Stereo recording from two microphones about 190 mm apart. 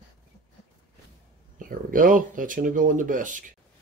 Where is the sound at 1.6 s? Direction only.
45° right (ahead or behind).